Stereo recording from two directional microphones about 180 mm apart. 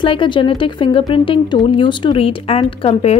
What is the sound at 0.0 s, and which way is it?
Speech, 30° left (ahead or behind).